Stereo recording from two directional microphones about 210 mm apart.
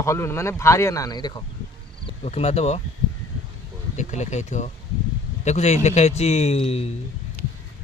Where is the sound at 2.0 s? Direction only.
30° left (ahead or behind).